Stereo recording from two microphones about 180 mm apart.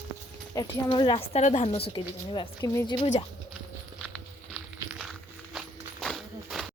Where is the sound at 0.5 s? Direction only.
25° left (ahead or behind).